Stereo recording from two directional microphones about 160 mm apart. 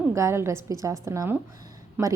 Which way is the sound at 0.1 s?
15° right (ahead or behind).